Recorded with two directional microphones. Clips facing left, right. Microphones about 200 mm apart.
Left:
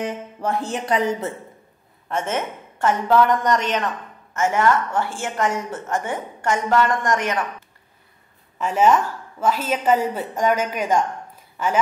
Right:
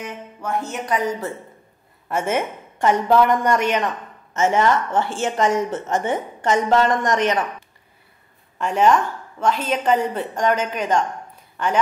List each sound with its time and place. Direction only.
0.0 s speech: 35° left (ahead or behind)
2.0 s a woman's voice: 10° right (ahead or behind)
8.5 s a woman's voice: 5° left (ahead or behind)